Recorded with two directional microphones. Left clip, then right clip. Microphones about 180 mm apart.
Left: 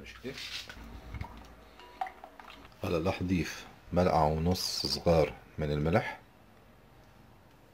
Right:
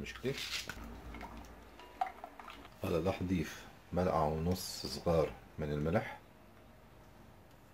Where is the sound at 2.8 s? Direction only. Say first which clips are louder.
Left 3 dB; 30° left (ahead or behind).